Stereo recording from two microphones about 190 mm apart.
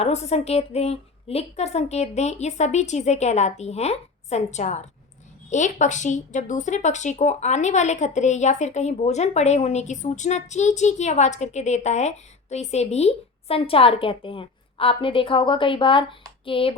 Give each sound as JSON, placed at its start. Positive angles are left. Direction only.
{"t": 0.0, "sound": "speech", "side_deg": 35}